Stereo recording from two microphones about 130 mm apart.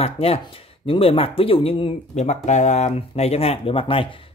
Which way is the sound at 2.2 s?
60° left (ahead or behind).